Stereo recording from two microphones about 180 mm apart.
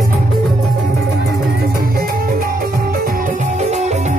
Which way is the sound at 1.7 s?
55° right (ahead or behind).